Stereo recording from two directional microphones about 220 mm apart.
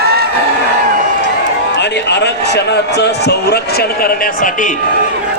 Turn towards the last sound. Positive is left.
turn(degrees=50)  # may be behind; listen again after turning